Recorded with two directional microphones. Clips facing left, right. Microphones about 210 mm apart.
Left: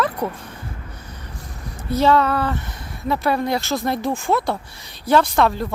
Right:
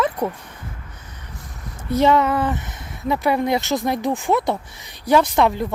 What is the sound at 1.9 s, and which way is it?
Speech, 20° right (ahead or behind).